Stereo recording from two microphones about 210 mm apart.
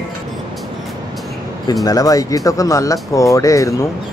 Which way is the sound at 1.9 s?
15° left (ahead or behind).